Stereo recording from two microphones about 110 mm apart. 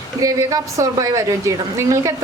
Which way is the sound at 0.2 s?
30° right (ahead or behind).